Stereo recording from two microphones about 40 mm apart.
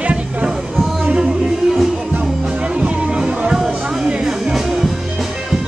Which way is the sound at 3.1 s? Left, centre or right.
Right.